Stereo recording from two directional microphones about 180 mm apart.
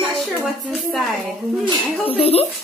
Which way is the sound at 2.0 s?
30° left (ahead or behind).